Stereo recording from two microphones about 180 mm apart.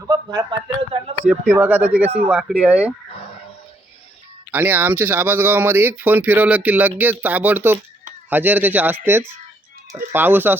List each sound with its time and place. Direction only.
0.1 s speech: 20° right (ahead or behind)
1.3 s speech: 10° right (ahead or behind)
4.5 s speech: 10° right (ahead or behind)